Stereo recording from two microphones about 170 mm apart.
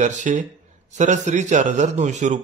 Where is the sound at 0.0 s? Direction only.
45° right (ahead or behind).